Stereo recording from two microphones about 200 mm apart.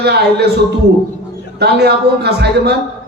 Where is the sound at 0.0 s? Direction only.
55° right (ahead or behind).